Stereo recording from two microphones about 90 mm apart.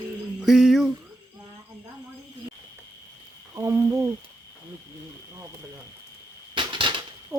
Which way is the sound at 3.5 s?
35° right (ahead or behind).